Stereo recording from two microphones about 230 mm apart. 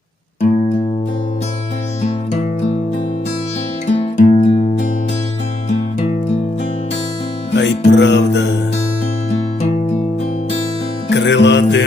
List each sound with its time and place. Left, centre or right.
3.8 s music: left
7.5 s music: left
11.1 s music: left